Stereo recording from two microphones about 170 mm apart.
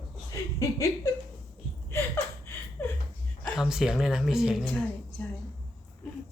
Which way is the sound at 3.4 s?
Centre (ahead or behind).